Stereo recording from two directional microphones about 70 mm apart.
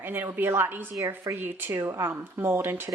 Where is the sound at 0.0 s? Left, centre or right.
Right.